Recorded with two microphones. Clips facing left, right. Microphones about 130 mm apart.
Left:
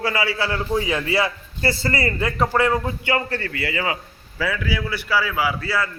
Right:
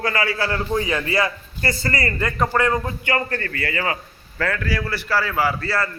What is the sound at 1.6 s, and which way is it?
Speech, 25° left (ahead or behind).